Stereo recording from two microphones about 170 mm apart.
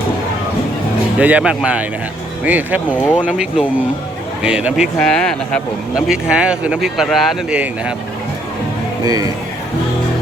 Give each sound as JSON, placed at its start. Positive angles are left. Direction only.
{"t": 1.2, "sound": "speech", "side_deg": -10}
{"t": 4.9, "sound": "speech", "side_deg": 5}
{"t": 9.0, "sound": "speech", "side_deg": -20}